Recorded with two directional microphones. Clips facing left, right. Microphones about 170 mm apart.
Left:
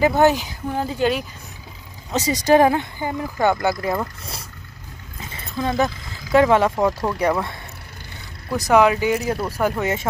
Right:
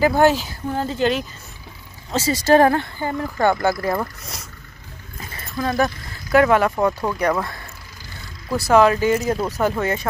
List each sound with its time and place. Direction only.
0.0 s speech: 20° left (ahead or behind)
5.2 s a sound: 25° left (ahead or behind)
6.3 s speech: 25° left (ahead or behind)
6.7 s speech: 5° left (ahead or behind)
8.5 s speech: 15° left (ahead or behind)